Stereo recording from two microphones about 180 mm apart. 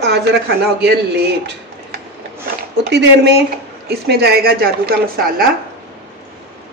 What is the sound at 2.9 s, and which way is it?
Speech, 70° right (ahead or behind).